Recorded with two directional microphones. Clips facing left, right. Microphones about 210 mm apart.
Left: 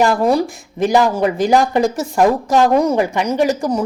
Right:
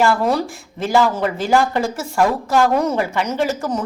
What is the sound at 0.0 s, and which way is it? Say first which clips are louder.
Speech: left 3 dB; 15° left (ahead or behind).